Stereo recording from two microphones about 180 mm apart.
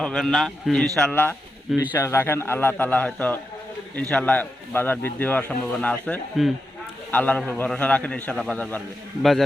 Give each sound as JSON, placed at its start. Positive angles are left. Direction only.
{"t": 0.0, "sound": "a man's voice", "side_deg": 5}
{"t": 1.7, "sound": "speech", "side_deg": -10}
{"t": 2.0, "sound": "speech", "side_deg": 15}